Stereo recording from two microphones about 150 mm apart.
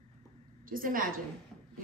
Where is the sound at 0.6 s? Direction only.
70° right (ahead or behind).